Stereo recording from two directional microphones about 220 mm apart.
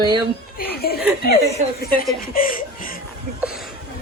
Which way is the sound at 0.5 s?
45° left (ahead or behind).